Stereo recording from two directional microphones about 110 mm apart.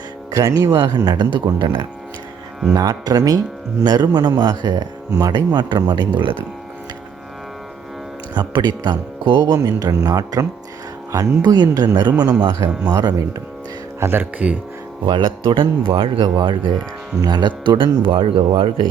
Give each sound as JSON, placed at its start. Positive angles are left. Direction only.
{"t": 0.3, "sound": "speech", "side_deg": -35}
{"t": 8.3, "sound": "speech", "side_deg": -40}
{"t": 14.0, "sound": "speech", "side_deg": -20}
{"t": 15.0, "sound": "speech", "side_deg": -45}
{"t": 16.2, "sound": "speech", "side_deg": -45}